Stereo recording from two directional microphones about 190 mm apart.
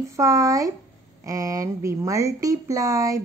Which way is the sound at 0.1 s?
15° right (ahead or behind).